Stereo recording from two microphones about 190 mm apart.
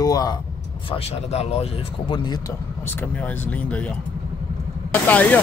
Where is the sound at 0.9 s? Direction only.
35° left (ahead or behind).